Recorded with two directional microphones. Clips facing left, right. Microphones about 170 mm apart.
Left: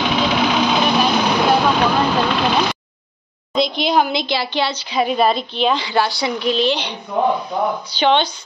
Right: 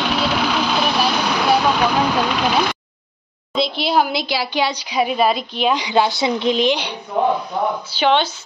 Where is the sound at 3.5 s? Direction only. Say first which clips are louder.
Left 2 dB; 5° right (ahead or behind).